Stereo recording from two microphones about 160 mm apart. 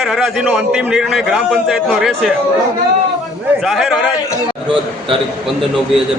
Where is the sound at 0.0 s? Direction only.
Centre (ahead or behind).